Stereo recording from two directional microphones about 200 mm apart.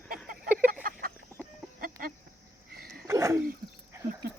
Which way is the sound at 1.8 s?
45° right (ahead or behind).